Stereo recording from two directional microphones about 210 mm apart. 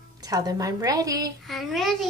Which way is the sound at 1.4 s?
Centre (ahead or behind).